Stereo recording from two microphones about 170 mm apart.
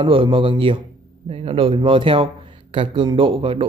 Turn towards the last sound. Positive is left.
turn(degrees=-30)  # may be behind; listen again after turning